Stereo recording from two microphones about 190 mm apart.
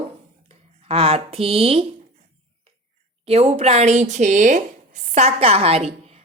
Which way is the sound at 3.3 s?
35° right (ahead or behind).